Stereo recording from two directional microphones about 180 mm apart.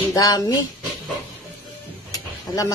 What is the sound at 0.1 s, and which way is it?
Speech, 20° left (ahead or behind).